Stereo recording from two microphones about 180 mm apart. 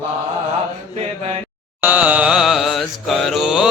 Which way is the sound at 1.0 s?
35° right (ahead or behind).